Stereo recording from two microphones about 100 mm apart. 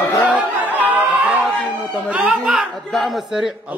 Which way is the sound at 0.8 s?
15° right (ahead or behind).